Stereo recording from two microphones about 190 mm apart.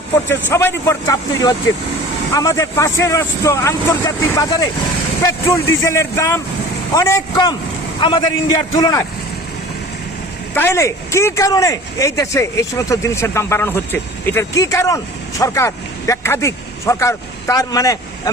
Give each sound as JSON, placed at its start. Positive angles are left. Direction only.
{"t": 0.3, "sound": "a man's voice", "side_deg": 10}
{"t": 10.5, "sound": "speech", "side_deg": 10}